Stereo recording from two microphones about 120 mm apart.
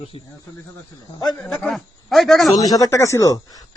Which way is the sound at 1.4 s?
Centre (ahead or behind).